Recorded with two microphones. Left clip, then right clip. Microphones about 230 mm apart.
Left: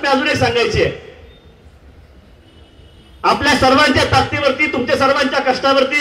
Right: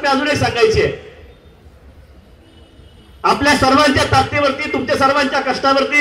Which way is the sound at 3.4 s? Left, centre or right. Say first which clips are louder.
Even; left.